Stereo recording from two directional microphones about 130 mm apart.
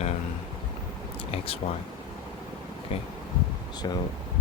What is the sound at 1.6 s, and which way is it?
Speech, 50° left (ahead or behind).